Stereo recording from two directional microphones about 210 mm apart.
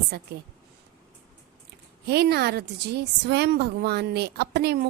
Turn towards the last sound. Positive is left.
turn(degrees=-50)  # may be behind; listen again after turning